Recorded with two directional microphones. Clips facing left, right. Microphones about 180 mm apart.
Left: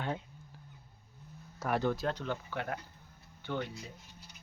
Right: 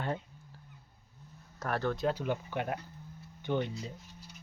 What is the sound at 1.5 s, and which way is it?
Speech, 10° left (ahead or behind).